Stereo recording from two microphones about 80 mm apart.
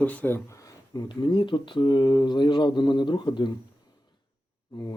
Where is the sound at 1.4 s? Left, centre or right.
Left.